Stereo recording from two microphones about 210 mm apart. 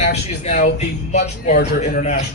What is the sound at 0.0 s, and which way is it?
Speech, 35° left (ahead or behind).